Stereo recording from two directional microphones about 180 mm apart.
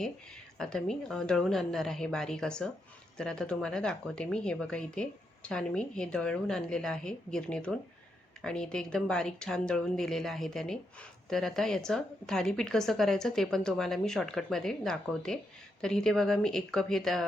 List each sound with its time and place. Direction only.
0.6 s speech: centre (ahead or behind)